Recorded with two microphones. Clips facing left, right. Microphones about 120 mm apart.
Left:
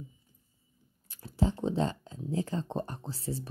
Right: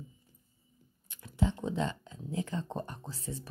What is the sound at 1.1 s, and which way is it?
Speech, 35° left (ahead or behind).